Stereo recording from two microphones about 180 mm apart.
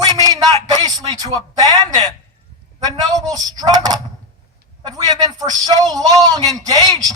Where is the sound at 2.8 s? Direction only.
20° right (ahead or behind).